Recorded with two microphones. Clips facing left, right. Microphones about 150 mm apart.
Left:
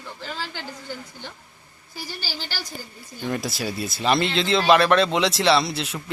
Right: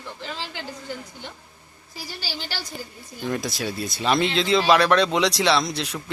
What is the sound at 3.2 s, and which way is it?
Speech, centre (ahead or behind).